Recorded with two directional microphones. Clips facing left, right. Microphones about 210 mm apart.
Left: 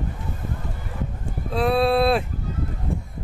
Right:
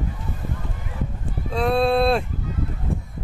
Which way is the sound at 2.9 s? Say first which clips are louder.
Right 1 dB; centre (ahead or behind).